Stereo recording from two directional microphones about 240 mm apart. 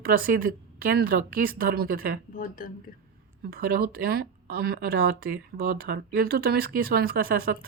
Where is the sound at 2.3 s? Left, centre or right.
Left.